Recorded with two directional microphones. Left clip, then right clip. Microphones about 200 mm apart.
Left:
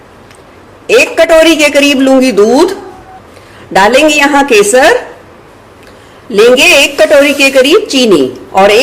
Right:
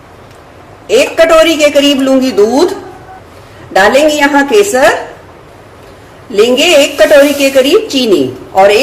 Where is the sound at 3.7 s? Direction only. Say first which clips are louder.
Left 1 dB; 40° left (ahead or behind).